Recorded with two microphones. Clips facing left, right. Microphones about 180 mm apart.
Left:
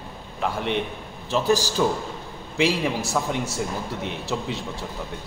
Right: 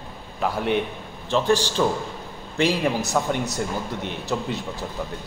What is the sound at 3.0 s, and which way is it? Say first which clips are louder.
A man's voice: right 2 dB; centre (ahead or behind).